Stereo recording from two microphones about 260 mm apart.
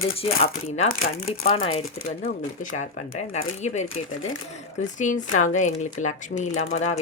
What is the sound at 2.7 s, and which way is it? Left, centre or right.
Speech, left.